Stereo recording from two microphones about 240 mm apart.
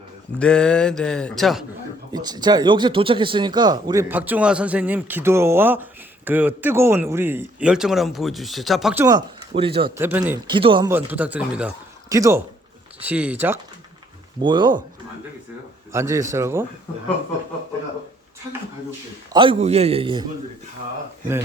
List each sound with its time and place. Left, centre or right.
0.3 s speech: centre
2.1 s speech: centre
9.5 s a man's voice: right
10.0 s speech: centre
10.5 s a man's voice: centre
10.8 s speech: centre
14.4 s a man's voice: centre
15.9 s speech: centre
19.3 s a man's voice: right